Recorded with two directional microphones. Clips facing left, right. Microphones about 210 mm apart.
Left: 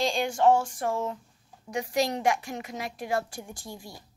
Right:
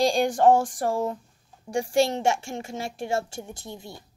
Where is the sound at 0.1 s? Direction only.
45° right (ahead or behind).